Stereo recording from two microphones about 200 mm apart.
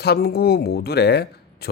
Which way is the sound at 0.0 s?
50° left (ahead or behind).